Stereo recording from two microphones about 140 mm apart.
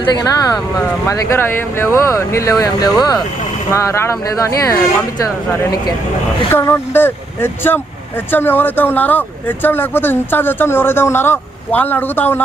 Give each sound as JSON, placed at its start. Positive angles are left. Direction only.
{"t": 0.0, "sound": "speech", "side_deg": 25}